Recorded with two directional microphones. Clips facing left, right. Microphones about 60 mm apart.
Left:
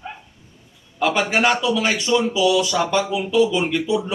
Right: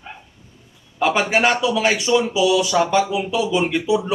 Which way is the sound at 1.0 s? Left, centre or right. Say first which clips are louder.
Right 1 dB; centre.